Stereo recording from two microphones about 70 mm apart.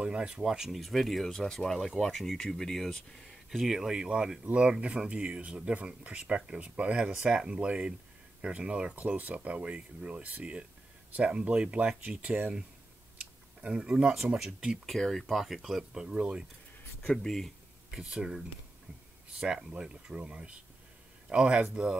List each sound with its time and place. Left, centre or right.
0.0 s speech: centre
13.6 s speech: centre
14.9 s speech: centre
17.0 s speech: centre
17.9 s speech: centre
19.4 s speech: centre